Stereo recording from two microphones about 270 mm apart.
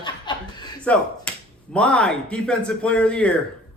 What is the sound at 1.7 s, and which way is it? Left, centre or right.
A man's voice, centre.